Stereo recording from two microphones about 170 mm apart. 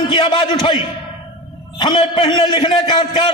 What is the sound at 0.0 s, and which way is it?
A man's voice, 30° left (ahead or behind).